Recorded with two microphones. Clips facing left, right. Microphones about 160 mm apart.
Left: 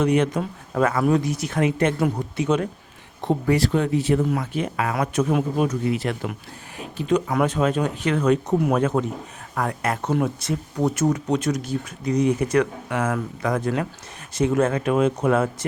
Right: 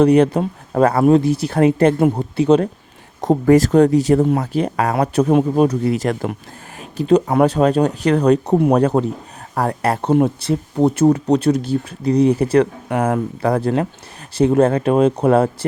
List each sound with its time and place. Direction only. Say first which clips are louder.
0.0 s speech: right 8 dB; 35° right (ahead or behind)
3.2 s speech: right 8 dB; 45° right (ahead or behind)